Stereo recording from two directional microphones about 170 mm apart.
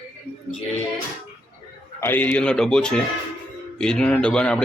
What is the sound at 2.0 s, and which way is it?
Speech, 10° left (ahead or behind).